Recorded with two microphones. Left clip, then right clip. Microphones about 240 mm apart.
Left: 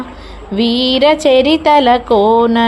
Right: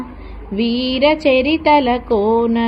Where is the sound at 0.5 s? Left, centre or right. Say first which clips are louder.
Left 6 dB; left.